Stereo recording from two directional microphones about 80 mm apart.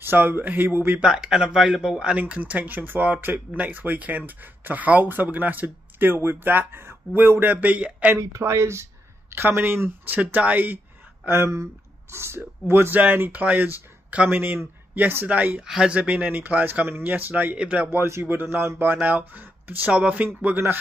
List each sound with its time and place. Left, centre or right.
0.0 s speech: right
1.0 s speech: centre
8.2 s speech: right
11.2 s speech: right; by 16.0 s centre
16.0 s speech: centre
17.8 s speech: right; by 20.2 s centre
20.4 s speech: right